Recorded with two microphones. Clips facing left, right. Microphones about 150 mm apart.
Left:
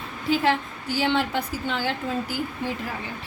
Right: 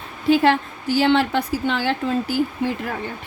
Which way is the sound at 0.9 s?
80° right.